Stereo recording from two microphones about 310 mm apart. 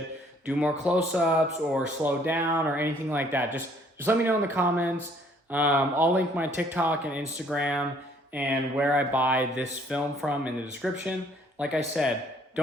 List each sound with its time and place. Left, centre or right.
0.4 s speech: centre